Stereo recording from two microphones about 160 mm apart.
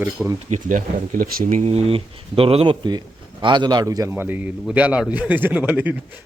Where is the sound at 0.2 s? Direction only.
5° right (ahead or behind).